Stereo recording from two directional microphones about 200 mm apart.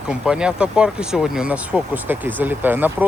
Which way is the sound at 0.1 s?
5° right (ahead or behind).